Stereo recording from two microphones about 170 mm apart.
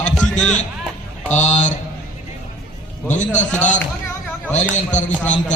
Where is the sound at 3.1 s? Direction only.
45° left (ahead or behind).